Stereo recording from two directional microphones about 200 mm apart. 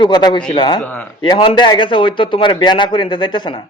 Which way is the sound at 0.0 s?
20° left (ahead or behind).